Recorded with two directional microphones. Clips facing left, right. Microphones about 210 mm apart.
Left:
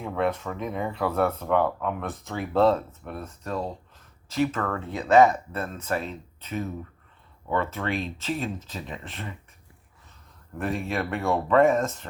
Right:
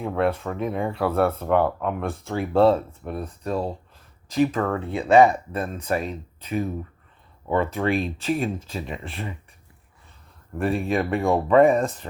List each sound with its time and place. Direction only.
0.0 s speech: 10° right (ahead or behind)
0.6 s speech: 30° right (ahead or behind)
0.9 s speech: 10° right (ahead or behind)
10.6 s speech: 15° right (ahead or behind)